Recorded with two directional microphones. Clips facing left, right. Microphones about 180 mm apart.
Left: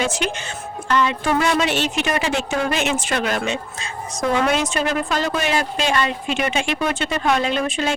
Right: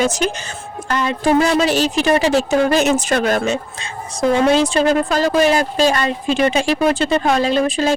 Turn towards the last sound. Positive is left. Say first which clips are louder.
# right 5 dB
turn(degrees=-35)  # may be behind; listen again after turning